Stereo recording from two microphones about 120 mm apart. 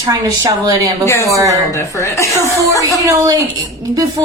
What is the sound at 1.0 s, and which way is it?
Speech, 25° left (ahead or behind).